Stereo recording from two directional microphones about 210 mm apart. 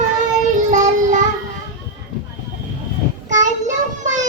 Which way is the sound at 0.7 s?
35° right (ahead or behind).